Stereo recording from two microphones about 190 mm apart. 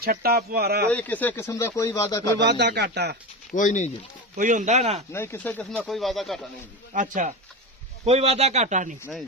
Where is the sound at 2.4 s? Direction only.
60° right (ahead or behind).